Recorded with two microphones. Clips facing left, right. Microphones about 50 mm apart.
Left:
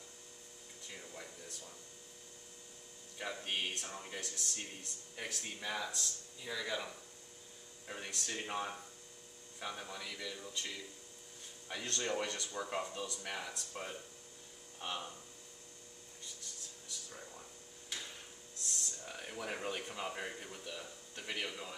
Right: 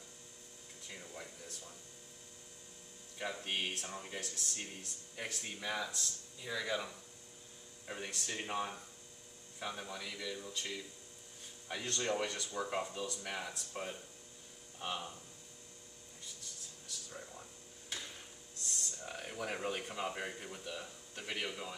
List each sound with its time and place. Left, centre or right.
0.8 s a sound: centre
3.2 s speech: centre
18.7 s speech: centre